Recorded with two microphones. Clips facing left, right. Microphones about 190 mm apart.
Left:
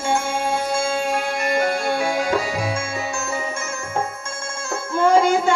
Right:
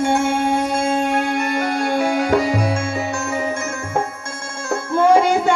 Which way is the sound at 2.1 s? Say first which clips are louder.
Right 5 dB; 60° right (ahead or behind).